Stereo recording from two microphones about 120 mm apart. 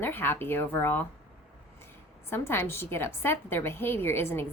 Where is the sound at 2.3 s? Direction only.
20° left (ahead or behind).